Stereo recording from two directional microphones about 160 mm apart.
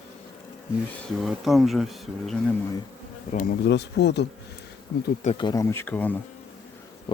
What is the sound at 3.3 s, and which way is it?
Speech, 60° left (ahead or behind).